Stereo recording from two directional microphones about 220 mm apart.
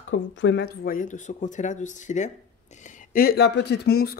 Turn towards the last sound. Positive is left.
turn(degrees=45)  # may be behind; listen again after turning